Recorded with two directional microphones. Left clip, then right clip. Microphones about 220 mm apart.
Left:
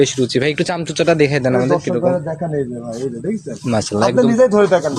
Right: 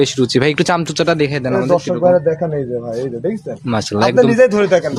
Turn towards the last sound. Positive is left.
turn(degrees=-25)  # may be behind; listen again after turning